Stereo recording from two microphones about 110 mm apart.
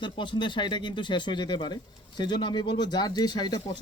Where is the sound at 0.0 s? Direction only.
45° left (ahead or behind).